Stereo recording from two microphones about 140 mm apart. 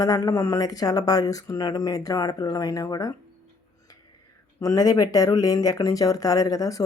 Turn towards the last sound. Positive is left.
turn(degrees=25)  # may be behind; listen again after turning